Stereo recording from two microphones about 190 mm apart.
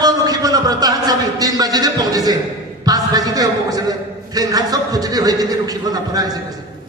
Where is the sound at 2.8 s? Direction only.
20° right (ahead or behind).